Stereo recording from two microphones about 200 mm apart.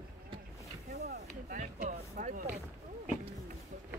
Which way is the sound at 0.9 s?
50° right (ahead or behind).